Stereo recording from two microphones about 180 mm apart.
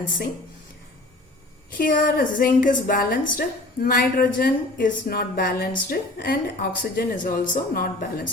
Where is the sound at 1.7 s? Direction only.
50° left (ahead or behind).